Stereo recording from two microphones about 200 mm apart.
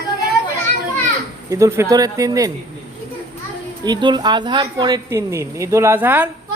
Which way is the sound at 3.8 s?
20° right (ahead or behind).